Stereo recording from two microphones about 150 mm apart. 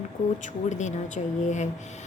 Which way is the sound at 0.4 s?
50° left (ahead or behind).